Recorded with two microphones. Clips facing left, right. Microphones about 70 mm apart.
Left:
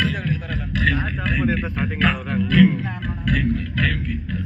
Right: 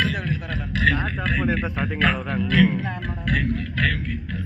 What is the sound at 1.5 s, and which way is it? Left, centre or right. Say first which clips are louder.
Music: left 1 dB; right.